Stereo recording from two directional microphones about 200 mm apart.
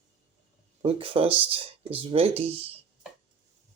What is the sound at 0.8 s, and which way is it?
Speech, 30° right (ahead or behind).